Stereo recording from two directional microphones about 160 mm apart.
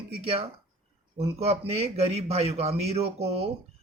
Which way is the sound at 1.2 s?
40° right (ahead or behind).